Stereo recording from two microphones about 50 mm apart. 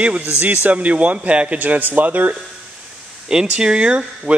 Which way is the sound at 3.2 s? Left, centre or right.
Centre.